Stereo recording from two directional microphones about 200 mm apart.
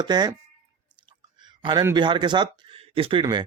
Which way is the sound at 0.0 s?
20° right (ahead or behind).